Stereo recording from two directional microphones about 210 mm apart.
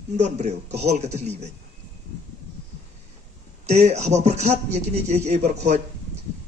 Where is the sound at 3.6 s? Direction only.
30° right (ahead or behind).